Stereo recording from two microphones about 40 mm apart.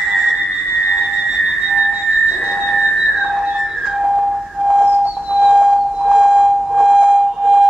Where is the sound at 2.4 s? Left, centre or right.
Centre.